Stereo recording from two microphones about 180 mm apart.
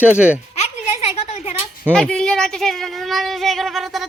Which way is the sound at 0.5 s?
35° left (ahead or behind).